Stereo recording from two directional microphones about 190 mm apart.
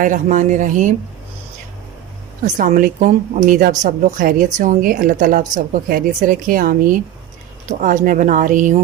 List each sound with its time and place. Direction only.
0.0 s speech: 40° right (ahead or behind)
2.6 s a woman's voice: 45° right (ahead or behind)